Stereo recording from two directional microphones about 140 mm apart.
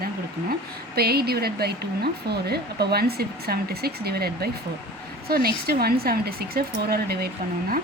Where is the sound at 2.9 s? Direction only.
90° right.